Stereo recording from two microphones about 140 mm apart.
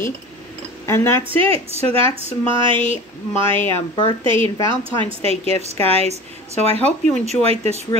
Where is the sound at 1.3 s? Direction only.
40° right (ahead or behind).